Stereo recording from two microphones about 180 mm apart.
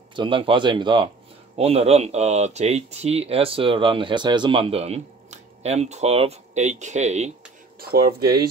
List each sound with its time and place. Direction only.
0.1 s speech: 25° right (ahead or behind)